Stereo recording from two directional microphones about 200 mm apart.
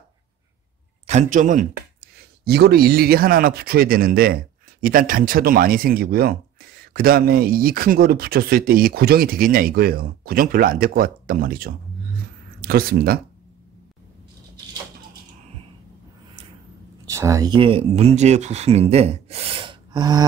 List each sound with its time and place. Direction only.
1.0 s a man's voice: 35° right (ahead or behind)
2.0 s speech: 50° right (ahead or behind)
17.0 s speech: 15° right (ahead or behind)